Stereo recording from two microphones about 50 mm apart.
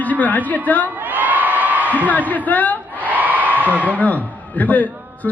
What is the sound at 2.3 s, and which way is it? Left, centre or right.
Speech, left.